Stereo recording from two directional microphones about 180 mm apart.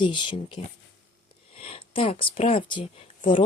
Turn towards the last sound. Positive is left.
turn(degrees=25)  # may be behind; listen again after turning